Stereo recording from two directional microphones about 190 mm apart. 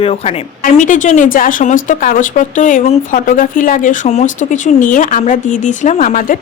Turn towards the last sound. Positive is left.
turn(degrees=40)  # may be behind; listen again after turning